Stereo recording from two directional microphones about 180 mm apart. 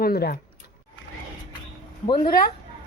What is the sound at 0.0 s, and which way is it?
Speech, 60° left (ahead or behind).